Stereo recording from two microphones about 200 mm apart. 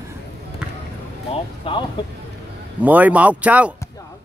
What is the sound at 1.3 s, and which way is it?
Music, 25° left (ahead or behind).